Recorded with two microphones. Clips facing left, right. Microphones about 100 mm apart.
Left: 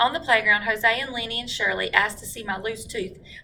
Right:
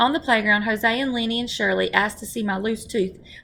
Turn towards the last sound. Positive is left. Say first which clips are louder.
# right 7 dB
turn(degrees=-20)  # may be behind; listen again after turning